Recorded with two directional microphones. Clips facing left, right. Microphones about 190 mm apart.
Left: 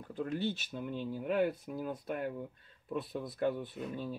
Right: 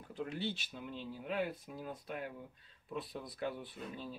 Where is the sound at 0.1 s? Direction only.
45° left (ahead or behind).